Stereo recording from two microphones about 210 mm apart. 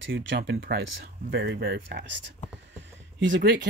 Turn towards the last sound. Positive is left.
turn(degrees=-60)  # may be behind; listen again after turning